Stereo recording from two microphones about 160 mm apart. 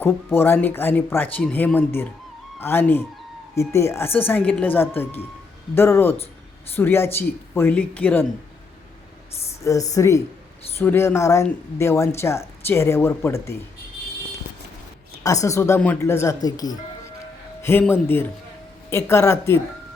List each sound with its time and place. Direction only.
0.0 s speech: 15° left (ahead or behind)
9.9 s speech: 20° left (ahead or behind)
15.2 s speech: 20° left (ahead or behind)